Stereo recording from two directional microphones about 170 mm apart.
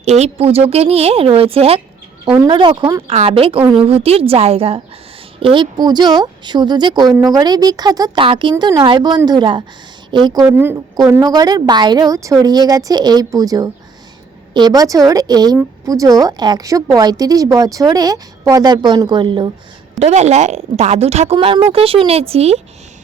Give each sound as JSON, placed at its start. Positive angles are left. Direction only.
{"t": 0.0, "sound": "a woman's voice", "side_deg": -40}
{"t": 10.4, "sound": "a woman's voice", "side_deg": -15}
{"t": 20.0, "sound": "speech", "side_deg": -40}
{"t": 21.3, "sound": "a woman's voice", "side_deg": -25}